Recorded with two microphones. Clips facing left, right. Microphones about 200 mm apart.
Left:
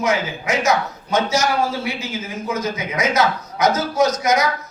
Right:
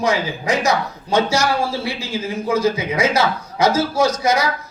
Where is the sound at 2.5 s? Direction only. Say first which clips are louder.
Right 6 dB; 30° right (ahead or behind).